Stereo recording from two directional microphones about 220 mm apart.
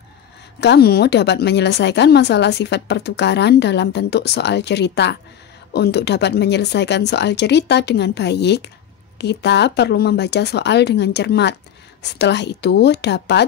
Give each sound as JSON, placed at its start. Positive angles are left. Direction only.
{"t": 0.6, "sound": "a woman's voice", "side_deg": 50}